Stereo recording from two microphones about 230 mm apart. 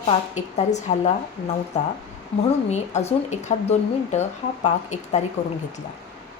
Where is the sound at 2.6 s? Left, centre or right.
Left.